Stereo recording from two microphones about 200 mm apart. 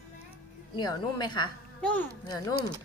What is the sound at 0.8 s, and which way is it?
Speech, 20° left (ahead or behind).